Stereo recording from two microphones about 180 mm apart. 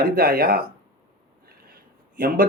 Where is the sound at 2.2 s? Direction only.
50° right (ahead or behind).